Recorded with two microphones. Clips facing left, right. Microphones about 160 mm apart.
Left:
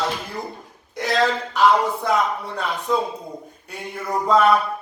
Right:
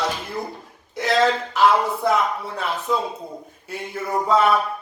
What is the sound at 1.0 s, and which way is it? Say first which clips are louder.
Speech: right 2 dB; centre (ahead or behind).